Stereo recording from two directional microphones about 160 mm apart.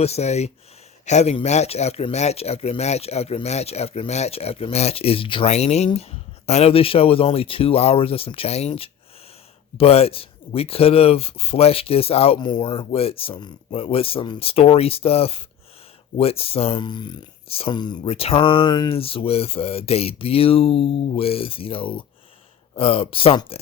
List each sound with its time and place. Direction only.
0.0 s speech: 40° left (ahead or behind)